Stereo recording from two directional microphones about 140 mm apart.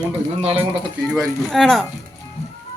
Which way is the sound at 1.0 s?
Centre (ahead or behind).